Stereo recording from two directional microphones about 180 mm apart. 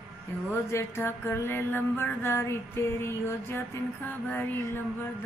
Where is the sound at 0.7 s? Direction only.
15° left (ahead or behind).